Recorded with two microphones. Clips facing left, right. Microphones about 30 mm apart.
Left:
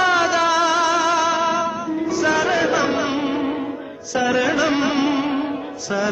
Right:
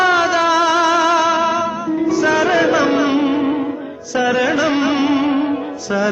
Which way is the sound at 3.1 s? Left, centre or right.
Right.